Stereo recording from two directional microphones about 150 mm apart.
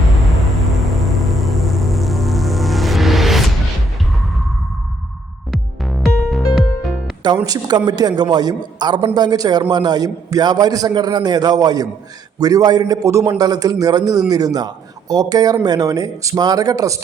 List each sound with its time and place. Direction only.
0.3 s music: centre (ahead or behind)
5.5 s music: centre (ahead or behind)
7.4 s a man's voice: 25° right (ahead or behind)